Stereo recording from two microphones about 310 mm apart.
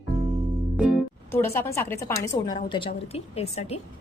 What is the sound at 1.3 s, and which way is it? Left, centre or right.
A woman's voice, centre.